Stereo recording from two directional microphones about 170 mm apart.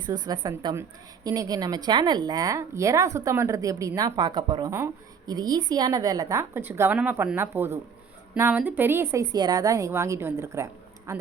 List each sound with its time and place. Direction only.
0.0 s a woman's voice: 25° right (ahead or behind)